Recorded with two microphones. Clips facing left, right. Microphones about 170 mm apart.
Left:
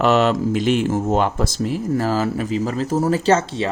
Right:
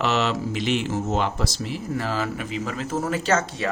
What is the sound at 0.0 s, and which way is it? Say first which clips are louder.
Speech: left 7 dB; 50° left (ahead or behind).